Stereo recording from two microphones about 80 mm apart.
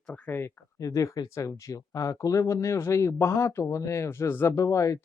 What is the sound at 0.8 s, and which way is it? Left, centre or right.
Speech, left.